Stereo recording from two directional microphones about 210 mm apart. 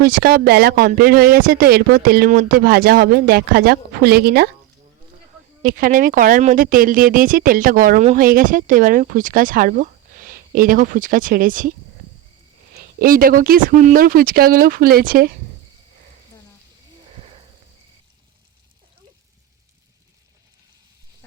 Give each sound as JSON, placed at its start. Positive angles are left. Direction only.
{"t": 0.0, "sound": "speech", "side_deg": -45}
{"t": 5.6, "sound": "speech", "side_deg": -40}
{"t": 12.7, "sound": "speech", "side_deg": -45}